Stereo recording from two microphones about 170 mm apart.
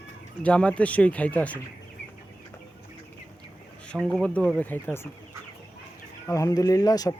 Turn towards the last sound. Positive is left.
turn(degrees=20)  # may be behind; listen again after turning